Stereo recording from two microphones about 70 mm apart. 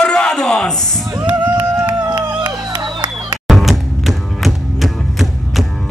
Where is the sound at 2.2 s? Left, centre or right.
Right.